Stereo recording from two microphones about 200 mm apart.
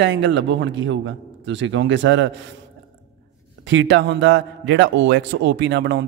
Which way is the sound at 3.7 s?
65° right (ahead or behind).